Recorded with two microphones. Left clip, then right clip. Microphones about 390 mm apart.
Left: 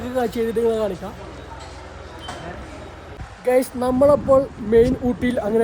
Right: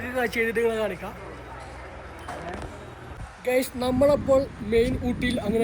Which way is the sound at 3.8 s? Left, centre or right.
Centre.